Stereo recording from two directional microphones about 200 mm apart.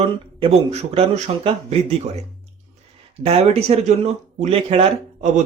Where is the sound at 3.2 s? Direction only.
30° right (ahead or behind).